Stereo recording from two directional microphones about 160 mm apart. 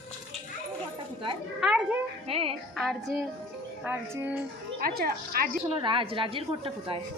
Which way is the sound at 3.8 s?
10° right (ahead or behind).